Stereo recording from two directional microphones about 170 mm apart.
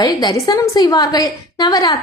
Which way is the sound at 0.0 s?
25° left (ahead or behind).